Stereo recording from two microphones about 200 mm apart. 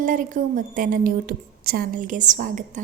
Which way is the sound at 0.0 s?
40° right (ahead or behind).